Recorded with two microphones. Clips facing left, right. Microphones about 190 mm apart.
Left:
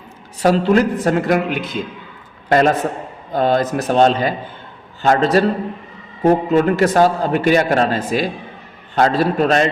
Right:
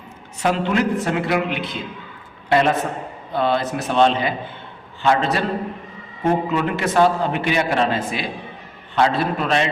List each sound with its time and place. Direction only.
0.4 s a man's voice: 35° left (ahead or behind)